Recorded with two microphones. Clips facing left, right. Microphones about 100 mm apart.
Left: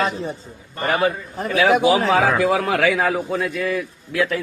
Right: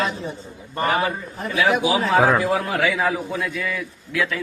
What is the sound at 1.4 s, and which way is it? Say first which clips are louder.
A man's voice: left 4 dB; 55° left (ahead or behind).